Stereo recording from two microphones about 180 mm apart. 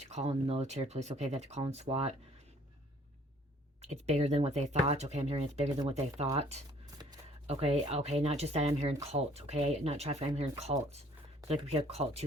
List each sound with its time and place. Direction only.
0.0 s speech: 35° right (ahead or behind)
3.8 s speech: 40° right (ahead or behind)